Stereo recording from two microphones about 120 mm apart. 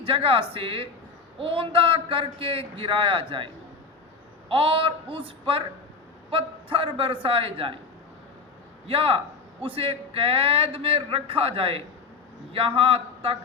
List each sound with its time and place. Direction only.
0.0 s a man's voice: 50° right (ahead or behind)
8.9 s a man's voice: 50° right (ahead or behind)